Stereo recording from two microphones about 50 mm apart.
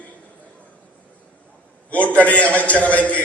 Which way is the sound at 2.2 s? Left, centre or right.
Left.